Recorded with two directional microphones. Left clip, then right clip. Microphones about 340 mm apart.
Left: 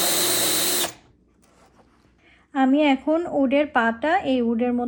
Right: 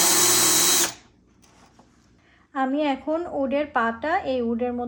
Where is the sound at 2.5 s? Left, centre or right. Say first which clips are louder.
Left 5 dB; left.